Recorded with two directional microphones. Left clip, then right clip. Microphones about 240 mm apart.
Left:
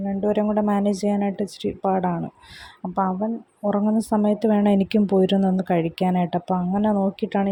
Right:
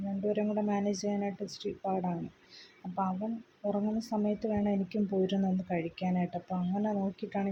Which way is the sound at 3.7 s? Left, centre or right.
Left.